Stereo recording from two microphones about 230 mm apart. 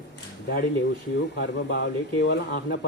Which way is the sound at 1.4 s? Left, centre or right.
Left.